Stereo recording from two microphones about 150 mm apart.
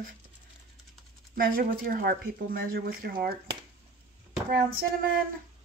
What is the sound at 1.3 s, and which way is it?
Speech, 80° right.